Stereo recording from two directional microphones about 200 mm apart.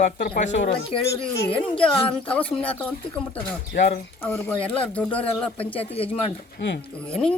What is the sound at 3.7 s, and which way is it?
Speech, 50° left (ahead or behind).